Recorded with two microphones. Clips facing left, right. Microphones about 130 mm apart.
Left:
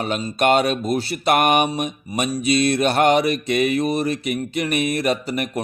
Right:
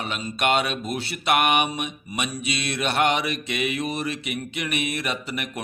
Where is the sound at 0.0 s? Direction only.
40° left (ahead or behind).